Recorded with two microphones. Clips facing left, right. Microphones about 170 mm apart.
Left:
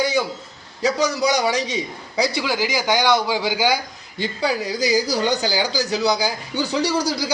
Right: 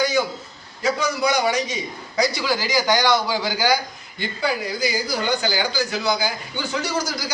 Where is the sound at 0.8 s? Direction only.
35° left (ahead or behind).